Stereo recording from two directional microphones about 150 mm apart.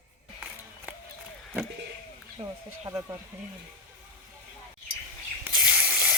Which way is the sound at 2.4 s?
40° right (ahead or behind).